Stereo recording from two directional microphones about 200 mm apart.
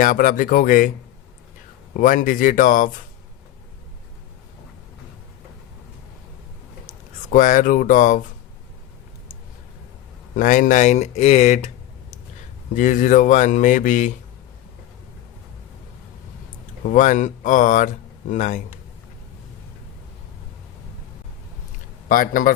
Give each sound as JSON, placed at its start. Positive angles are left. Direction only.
{"t": 0.0, "sound": "speech", "side_deg": 40}
{"t": 1.9, "sound": "speech", "side_deg": 40}
{"t": 6.8, "sound": "speech", "side_deg": 40}
{"t": 10.3, "sound": "speech", "side_deg": 40}
{"t": 12.7, "sound": "speech", "side_deg": 40}
{"t": 16.8, "sound": "speech", "side_deg": 40}
{"t": 22.1, "sound": "speech", "side_deg": 45}